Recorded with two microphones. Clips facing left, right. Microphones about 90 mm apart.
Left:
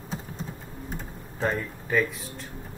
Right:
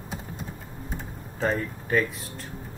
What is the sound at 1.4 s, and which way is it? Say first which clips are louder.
Speech: right 1 dB; centre (ahead or behind).